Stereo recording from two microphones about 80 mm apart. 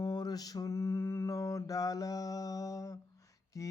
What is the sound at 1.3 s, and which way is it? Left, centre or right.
Mantra, left.